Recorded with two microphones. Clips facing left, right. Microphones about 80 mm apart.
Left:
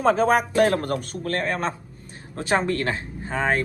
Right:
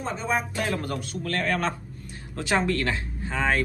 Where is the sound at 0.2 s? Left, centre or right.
Left.